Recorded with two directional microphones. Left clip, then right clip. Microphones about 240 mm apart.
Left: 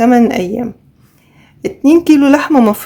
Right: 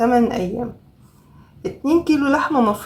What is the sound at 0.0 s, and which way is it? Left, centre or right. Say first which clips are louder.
A woman's voice: left 6 dB; left.